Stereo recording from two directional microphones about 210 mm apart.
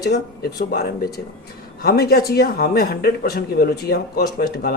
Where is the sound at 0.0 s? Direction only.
50° left (ahead or behind).